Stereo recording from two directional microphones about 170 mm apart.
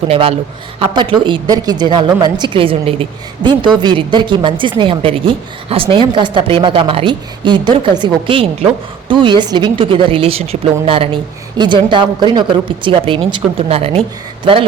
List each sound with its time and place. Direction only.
0.1 s a woman's voice: 35° right (ahead or behind)